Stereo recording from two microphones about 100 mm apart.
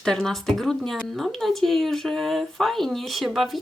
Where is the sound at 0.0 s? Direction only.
5° left (ahead or behind).